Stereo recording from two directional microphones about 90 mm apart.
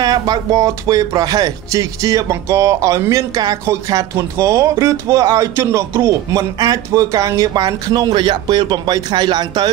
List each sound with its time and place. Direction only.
0.0 s speech: 50° right (ahead or behind)